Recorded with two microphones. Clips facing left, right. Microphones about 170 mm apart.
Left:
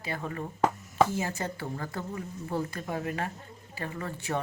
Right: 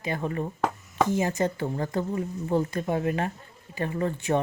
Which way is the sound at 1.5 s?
20° right (ahead or behind).